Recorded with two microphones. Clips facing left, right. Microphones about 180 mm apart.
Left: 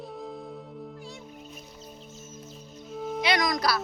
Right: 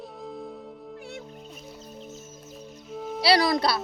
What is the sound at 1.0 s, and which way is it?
Music, 65° right (ahead or behind).